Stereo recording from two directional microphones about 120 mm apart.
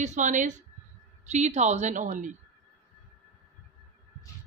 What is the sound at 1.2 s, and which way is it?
A woman's voice, 70° right (ahead or behind).